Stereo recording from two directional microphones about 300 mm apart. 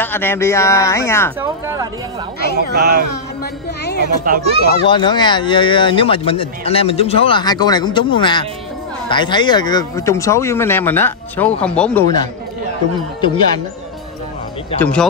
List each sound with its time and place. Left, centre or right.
0.0 s speech: centre
2.5 s speech: right
3.8 s a sound: left
4.8 s speech: centre
14.8 s speech: centre